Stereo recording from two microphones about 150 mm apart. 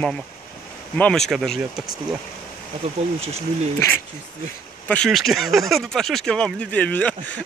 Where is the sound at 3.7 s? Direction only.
15° left (ahead or behind).